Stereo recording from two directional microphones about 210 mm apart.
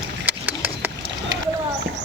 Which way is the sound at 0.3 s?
10° right (ahead or behind).